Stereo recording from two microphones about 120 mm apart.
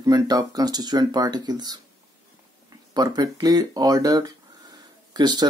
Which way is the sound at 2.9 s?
35° right (ahead or behind).